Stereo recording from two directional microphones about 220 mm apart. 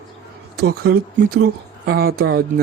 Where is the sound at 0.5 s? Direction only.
45° right (ahead or behind).